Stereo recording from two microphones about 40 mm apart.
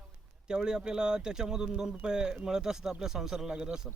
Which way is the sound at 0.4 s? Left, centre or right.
Centre.